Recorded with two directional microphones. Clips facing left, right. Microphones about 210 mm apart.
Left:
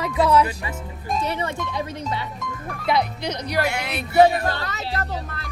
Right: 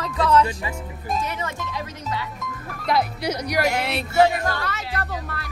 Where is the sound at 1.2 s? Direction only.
25° left (ahead or behind).